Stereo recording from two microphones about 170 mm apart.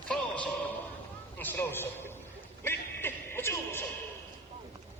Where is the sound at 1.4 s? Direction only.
15° left (ahead or behind).